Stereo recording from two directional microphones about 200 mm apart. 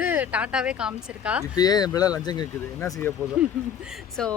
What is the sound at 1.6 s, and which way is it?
Speech, 20° left (ahead or behind).